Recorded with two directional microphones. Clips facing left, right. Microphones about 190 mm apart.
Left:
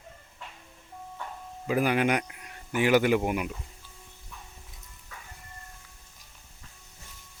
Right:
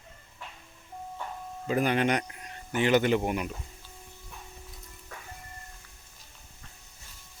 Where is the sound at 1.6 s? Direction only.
10° left (ahead or behind).